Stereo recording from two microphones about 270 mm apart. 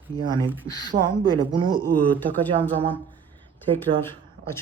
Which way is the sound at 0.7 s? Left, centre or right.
Centre.